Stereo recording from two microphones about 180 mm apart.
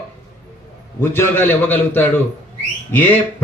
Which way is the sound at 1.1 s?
10° left (ahead or behind).